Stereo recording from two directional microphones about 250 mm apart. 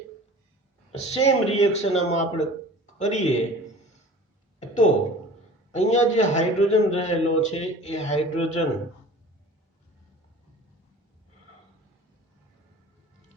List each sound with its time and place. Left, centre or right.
0.9 s a man's voice: left
4.6 s a sound: left
5.7 s a man's voice: left